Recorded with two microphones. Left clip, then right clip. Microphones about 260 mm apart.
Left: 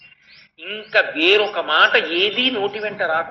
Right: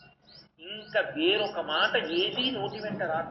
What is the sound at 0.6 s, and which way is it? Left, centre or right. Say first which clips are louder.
A man's voice: left 11 dB; left.